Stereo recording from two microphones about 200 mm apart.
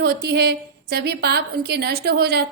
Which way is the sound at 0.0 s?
50° right (ahead or behind).